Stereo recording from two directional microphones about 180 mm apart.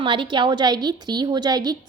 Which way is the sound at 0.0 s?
30° right (ahead or behind).